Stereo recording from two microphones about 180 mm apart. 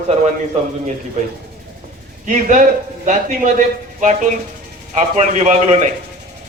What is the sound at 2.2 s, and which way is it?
A man's voice, 45° right (ahead or behind).